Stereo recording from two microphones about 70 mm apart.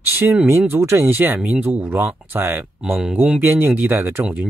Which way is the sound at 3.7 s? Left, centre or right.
Right.